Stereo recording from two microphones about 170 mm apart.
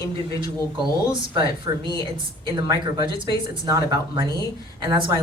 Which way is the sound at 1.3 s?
30° right (ahead or behind).